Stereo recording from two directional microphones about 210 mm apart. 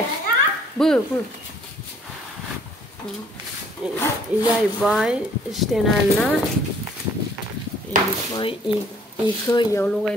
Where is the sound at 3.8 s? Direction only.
5° right (ahead or behind).